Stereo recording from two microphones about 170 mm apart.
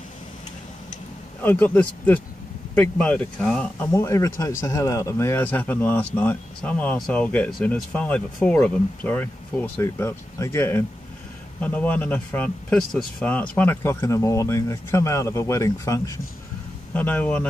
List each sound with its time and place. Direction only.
1.4 s speech: 10° left (ahead or behind)
3.8 s speech: 15° left (ahead or behind)
16.9 s speech: 10° left (ahead or behind)